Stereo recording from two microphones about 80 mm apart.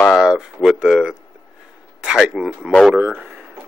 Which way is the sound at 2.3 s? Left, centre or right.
Centre.